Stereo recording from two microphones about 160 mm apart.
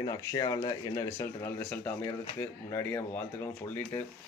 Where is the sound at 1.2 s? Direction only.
15° left (ahead or behind).